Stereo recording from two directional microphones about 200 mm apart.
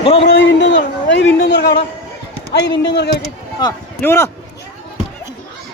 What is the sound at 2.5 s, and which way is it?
Speech, 60° left (ahead or behind).